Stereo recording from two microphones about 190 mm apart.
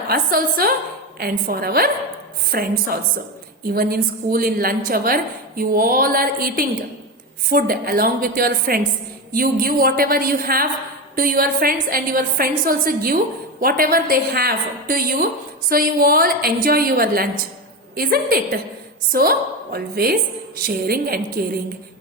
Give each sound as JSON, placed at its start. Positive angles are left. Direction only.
{"t": 0.1, "sound": "a woman's voice", "side_deg": -50}